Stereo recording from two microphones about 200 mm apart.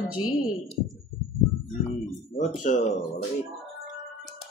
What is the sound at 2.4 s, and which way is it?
Speech, 35° left (ahead or behind).